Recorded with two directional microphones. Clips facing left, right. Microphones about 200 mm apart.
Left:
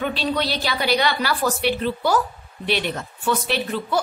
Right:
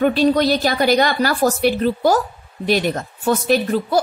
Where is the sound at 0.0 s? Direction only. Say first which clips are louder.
Right 9 dB; 45° right (ahead or behind).